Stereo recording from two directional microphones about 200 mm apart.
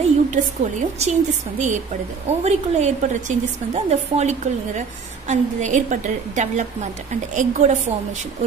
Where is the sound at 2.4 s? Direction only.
35° right (ahead or behind).